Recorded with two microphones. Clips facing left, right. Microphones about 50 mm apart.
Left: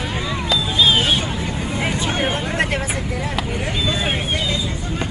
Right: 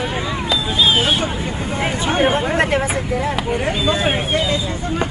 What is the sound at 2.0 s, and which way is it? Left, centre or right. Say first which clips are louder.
Speech: right 5 dB; right.